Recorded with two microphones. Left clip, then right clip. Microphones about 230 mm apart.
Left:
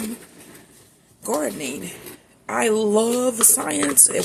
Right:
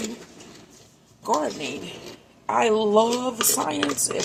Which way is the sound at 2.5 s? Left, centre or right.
Left.